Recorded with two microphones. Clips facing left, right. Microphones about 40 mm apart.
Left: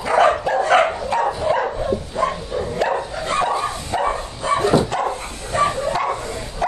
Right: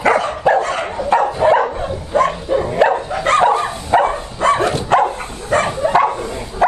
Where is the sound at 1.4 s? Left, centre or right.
Right.